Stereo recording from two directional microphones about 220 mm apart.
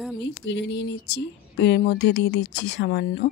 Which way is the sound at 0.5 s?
55° left (ahead or behind).